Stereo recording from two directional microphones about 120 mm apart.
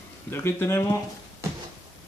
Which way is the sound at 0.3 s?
20° left (ahead or behind).